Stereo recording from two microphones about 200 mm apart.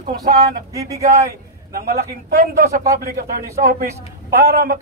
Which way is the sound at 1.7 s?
50° right (ahead or behind).